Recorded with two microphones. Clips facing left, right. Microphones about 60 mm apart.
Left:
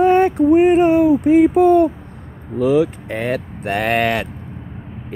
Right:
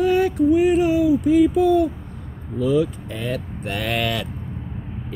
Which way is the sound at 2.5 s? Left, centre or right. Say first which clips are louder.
Left 4 dB; left.